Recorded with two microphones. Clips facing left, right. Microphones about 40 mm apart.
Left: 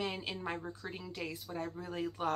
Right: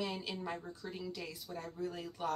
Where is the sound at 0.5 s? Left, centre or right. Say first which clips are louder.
Left 2 dB; left.